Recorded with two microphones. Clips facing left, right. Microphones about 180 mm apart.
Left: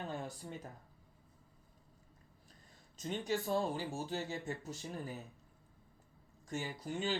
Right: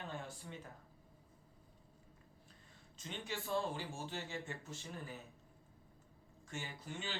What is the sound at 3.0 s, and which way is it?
Speech, 40° left (ahead or behind).